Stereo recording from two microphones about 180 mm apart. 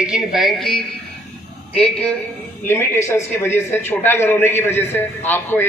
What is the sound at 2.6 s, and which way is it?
A man's voice, 15° left (ahead or behind).